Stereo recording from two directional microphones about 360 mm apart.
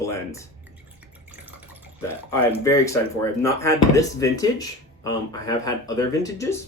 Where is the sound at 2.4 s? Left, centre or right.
Centre.